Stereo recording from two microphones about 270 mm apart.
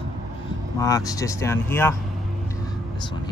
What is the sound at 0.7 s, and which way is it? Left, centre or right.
Speech, centre.